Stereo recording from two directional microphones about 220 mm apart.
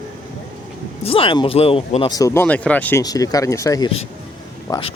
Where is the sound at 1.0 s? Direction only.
25° left (ahead or behind).